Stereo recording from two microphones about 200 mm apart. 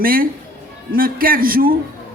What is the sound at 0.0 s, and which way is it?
A woman's voice, 45° right (ahead or behind).